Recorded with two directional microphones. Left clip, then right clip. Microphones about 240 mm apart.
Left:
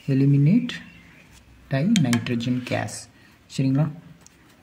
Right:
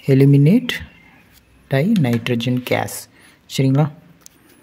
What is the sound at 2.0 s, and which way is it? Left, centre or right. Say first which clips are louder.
Speech: right 5 dB; right.